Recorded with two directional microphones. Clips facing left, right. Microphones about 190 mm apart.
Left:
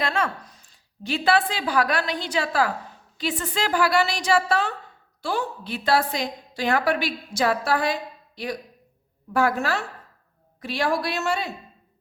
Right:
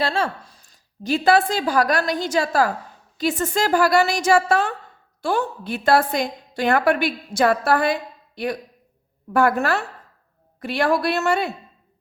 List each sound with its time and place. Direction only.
0.0 s a woman's voice: 30° right (ahead or behind); by 7.9 s 55° right (ahead or behind)
9.3 s a woman's voice: 60° right (ahead or behind)